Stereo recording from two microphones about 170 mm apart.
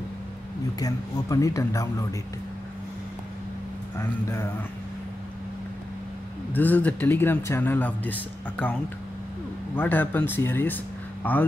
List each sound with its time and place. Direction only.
0.7 s speech: 20° left (ahead or behind)
4.0 s a man's voice: 15° left (ahead or behind)
6.5 s a man's voice: 10° left (ahead or behind)
9.8 s a man's voice: 10° left (ahead or behind)